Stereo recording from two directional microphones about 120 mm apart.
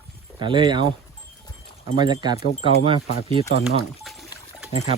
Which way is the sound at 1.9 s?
40° right (ahead or behind).